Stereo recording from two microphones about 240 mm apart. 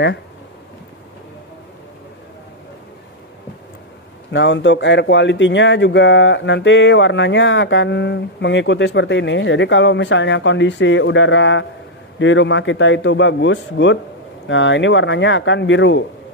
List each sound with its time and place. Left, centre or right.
4.3 s speech: left